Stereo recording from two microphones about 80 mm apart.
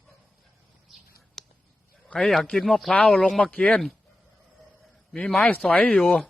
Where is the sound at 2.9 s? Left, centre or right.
Centre.